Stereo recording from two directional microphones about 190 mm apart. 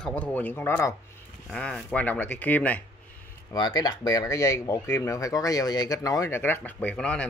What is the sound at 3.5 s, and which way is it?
Speech, 20° left (ahead or behind).